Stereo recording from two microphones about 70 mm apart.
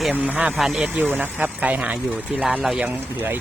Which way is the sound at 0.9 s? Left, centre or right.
Right.